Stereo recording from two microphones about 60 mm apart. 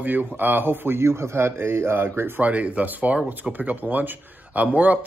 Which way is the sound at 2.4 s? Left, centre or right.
Right.